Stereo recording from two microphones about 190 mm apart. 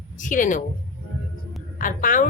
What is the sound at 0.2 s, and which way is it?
Speech, 45° left (ahead or behind).